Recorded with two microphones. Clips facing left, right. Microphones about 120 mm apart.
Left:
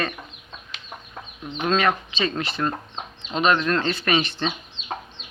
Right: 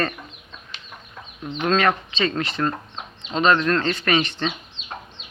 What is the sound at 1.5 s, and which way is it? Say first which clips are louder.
Speech: right 1 dB; 20° left (ahead or behind).